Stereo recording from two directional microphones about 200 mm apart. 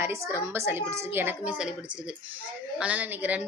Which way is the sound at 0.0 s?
15° right (ahead or behind).